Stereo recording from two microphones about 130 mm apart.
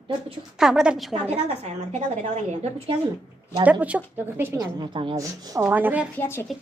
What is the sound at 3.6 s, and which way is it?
Speech, 10° right (ahead or behind).